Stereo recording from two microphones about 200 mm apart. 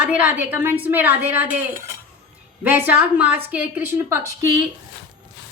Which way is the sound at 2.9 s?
5° right (ahead or behind).